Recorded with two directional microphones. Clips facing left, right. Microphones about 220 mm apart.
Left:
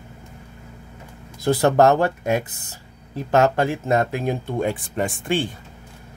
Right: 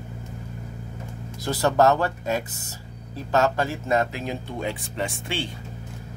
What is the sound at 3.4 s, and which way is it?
Speech, 50° left (ahead or behind).